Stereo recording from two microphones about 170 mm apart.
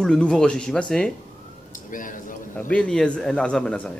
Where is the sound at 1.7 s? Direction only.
50° left (ahead or behind).